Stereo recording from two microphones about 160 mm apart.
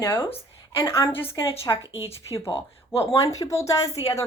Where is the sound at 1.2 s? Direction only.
35° left (ahead or behind).